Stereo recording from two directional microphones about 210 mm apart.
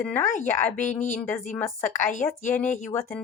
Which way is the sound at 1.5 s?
10° left (ahead or behind).